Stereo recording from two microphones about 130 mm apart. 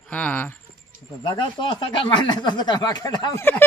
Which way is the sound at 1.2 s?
35° left (ahead or behind).